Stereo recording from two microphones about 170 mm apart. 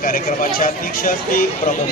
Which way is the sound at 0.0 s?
55° left (ahead or behind).